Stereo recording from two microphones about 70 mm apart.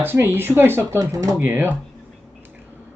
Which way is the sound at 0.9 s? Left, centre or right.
Right.